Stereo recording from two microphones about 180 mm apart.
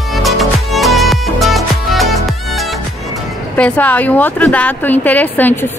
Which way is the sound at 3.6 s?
10° left (ahead or behind).